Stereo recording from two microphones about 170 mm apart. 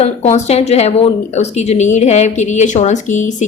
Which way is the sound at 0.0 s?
40° left (ahead or behind).